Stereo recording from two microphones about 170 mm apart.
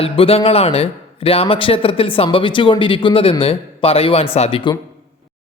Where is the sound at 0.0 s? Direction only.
35° left (ahead or behind).